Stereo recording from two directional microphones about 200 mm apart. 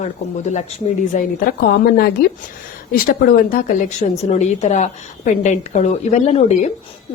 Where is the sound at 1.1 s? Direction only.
50° left (ahead or behind).